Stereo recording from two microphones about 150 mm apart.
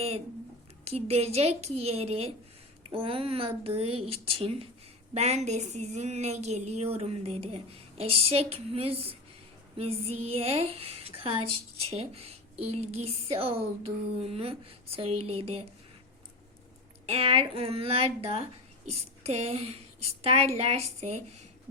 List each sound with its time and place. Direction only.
0.9 s a woman's voice: 45° right (ahead or behind)
17.1 s a woman's voice: 40° right (ahead or behind)